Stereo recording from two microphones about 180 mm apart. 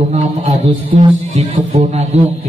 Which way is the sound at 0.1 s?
40° right (ahead or behind).